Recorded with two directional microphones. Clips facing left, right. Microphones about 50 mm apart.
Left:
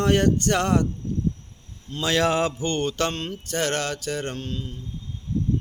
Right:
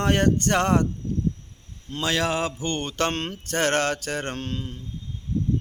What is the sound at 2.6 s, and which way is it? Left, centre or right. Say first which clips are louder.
Mantra: left 1 dB; right.